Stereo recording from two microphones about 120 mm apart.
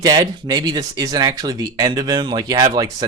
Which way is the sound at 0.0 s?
30° right (ahead or behind).